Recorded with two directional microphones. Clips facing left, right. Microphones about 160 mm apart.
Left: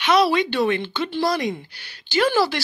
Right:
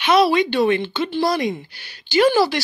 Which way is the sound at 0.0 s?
20° right (ahead or behind).